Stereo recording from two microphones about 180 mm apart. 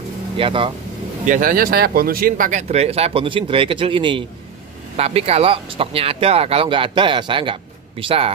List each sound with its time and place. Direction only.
0.4 s speech: 30° right (ahead or behind)
1.2 s speech: 45° right (ahead or behind); by 8.3 s 30° right (ahead or behind)